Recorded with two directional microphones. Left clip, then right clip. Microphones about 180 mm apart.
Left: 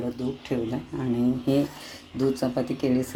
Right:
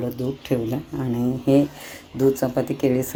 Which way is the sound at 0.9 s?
5° right (ahead or behind).